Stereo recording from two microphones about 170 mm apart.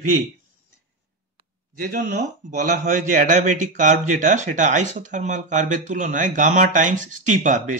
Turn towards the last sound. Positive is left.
turn(degrees=-50)  # may be behind; listen again after turning